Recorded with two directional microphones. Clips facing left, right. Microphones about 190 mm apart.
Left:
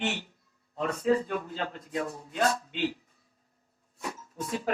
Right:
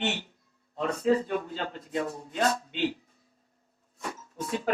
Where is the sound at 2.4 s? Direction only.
35° right (ahead or behind).